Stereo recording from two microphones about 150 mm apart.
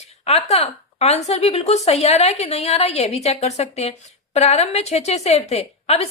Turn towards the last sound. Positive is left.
turn(degrees=45)  # may be behind; listen again after turning